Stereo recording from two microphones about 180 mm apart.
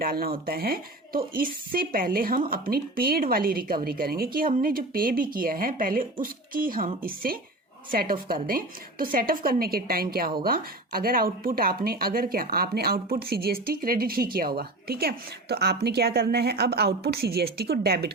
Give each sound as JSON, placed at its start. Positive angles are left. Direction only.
{"t": 0.0, "sound": "speech", "side_deg": -55}